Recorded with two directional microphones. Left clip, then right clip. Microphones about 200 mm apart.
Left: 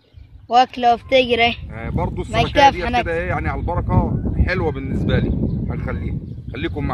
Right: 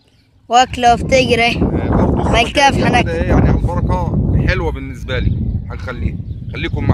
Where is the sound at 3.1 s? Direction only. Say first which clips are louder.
Right 5 dB; 10° left (ahead or behind).